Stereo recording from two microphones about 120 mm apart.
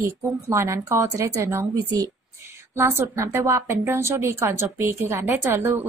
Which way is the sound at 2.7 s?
20° right (ahead or behind).